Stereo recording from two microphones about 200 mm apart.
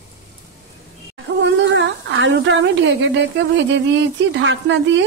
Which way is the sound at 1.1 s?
65° right (ahead or behind).